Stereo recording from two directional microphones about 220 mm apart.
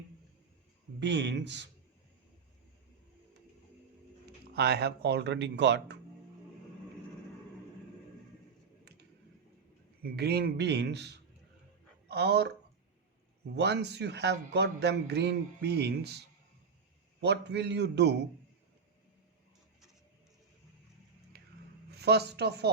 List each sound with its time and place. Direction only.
0.9 s speech: 55° right (ahead or behind)
4.5 s speech: 50° right (ahead or behind)
10.0 s speech: 45° right (ahead or behind)
13.6 s speech: 50° right (ahead or behind)
17.2 s speech: 50° right (ahead or behind)
21.3 s a sound: 50° right (ahead or behind)
21.9 s speech: 50° right (ahead or behind)